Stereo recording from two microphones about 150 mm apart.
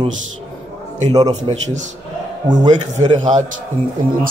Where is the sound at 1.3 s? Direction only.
50° right (ahead or behind).